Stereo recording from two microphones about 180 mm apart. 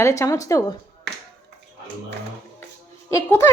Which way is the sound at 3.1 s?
15° left (ahead or behind).